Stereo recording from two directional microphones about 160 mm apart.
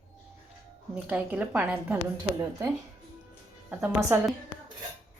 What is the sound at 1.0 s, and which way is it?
Speech, 10° right (ahead or behind).